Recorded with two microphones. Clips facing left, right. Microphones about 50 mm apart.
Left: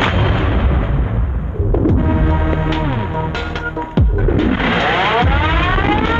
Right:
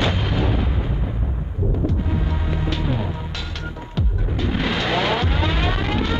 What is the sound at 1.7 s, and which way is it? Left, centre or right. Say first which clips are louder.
Music: left 11 dB; left.